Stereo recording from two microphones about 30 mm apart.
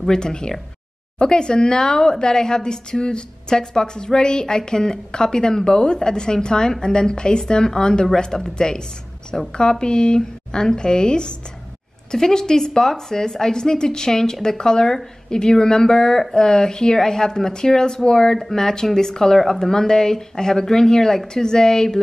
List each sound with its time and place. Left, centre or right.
0.1 s speech: left; by 19.7 s centre
19.7 s speech: left